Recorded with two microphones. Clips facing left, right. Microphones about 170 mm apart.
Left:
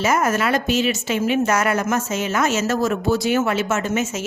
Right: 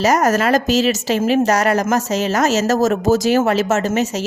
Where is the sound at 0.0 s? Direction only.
40° right (ahead or behind).